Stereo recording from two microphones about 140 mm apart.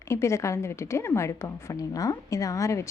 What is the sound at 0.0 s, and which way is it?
A woman's voice, 20° left (ahead or behind).